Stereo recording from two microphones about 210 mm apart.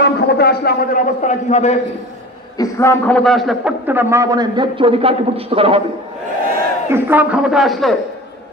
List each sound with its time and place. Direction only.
0.0 s a man's voice: 50° left (ahead or behind); by 1.8 s 35° left (ahead or behind)
2.6 s a man's voice: 10° left (ahead or behind); by 5.8 s 25° right (ahead or behind)
6.9 s a man's voice: 10° right (ahead or behind)